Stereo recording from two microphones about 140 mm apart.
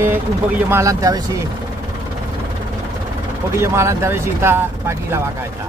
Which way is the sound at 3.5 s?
20° right (ahead or behind).